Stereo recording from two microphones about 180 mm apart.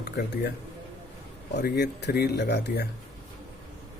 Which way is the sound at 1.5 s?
65° left (ahead or behind).